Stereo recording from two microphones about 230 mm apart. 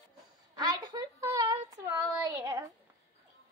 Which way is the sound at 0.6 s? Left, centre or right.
Centre.